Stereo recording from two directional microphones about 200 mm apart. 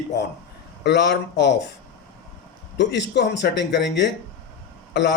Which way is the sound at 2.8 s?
60° left (ahead or behind).